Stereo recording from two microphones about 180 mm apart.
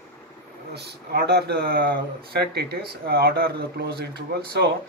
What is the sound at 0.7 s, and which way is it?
Speech, 65° right (ahead or behind).